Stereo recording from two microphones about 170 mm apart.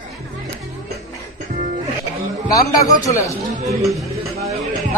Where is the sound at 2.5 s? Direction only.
20° left (ahead or behind).